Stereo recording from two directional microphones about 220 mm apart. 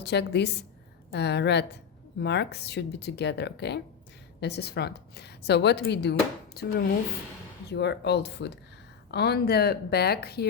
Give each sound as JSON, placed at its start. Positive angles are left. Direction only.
{"t": 0.0, "sound": "speech", "side_deg": 50}